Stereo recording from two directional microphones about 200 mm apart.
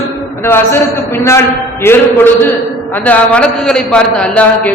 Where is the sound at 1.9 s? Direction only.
10° left (ahead or behind).